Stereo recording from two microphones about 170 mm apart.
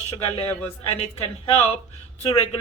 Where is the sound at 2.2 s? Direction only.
35° left (ahead or behind).